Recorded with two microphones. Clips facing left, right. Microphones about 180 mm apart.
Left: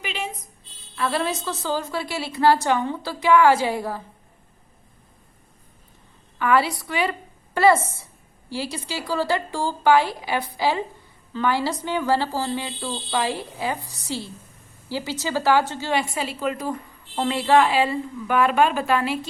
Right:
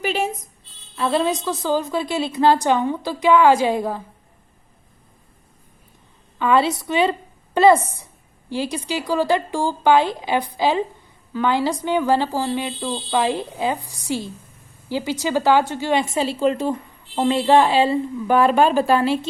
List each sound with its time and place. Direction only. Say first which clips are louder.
0.0 s a sound: right 9 dB; 45° right (ahead or behind)
0.9 s a woman's voice: right 4 dB; 25° right (ahead or behind)
6.4 s a woman's voice: right 3 dB; 25° right (ahead or behind)